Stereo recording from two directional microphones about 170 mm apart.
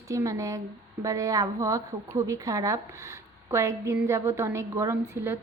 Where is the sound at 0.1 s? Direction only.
20° right (ahead or behind).